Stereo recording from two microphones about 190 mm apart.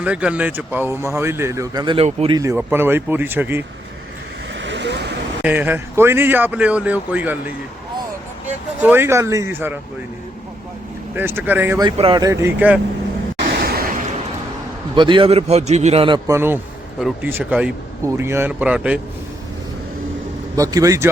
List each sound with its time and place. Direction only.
0.0 s speech: 5° right (ahead or behind); by 2.3 s 35° right (ahead or behind)
2.3 s speech: 15° right (ahead or behind)
4.6 s vehicle: 65° right (ahead or behind)
5.4 s speech: 10° right (ahead or behind)
8.8 s speech: 10° right (ahead or behind)
11.1 s speech: 10° right (ahead or behind)
11.9 s speech: 25° right (ahead or behind); by 12.8 s 10° right (ahead or behind)
13.5 s a sound: 55° right (ahead or behind)
14.9 s a man's voice: 25° right (ahead or behind); by 18.9 s 5° right (ahead or behind)
20.6 s speech: 20° right (ahead or behind)